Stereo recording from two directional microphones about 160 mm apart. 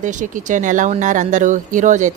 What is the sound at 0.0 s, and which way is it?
Speech, 55° right (ahead or behind).